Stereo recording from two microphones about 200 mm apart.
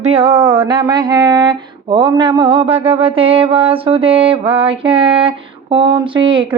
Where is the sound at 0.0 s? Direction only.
30° right (ahead or behind).